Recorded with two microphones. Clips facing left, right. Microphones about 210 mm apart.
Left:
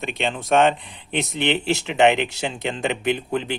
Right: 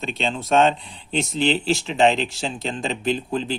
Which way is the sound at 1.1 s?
60° left (ahead or behind).